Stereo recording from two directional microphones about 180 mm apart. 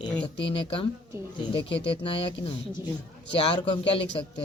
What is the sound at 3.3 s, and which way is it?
A man's voice, 30° left (ahead or behind).